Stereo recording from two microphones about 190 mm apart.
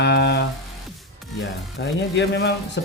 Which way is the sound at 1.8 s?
70° left (ahead or behind).